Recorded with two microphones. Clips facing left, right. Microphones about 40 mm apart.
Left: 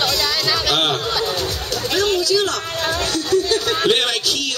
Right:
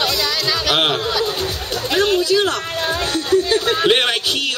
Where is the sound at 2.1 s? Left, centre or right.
Right.